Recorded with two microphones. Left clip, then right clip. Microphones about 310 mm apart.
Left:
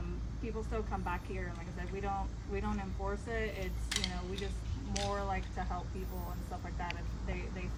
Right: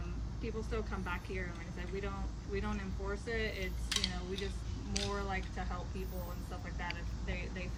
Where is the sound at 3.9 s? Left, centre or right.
Left.